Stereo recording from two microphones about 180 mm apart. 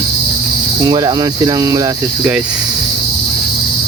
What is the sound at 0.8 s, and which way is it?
Speech, 20° right (ahead or behind).